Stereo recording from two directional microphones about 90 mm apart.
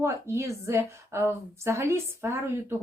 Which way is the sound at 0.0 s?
35° right (ahead or behind).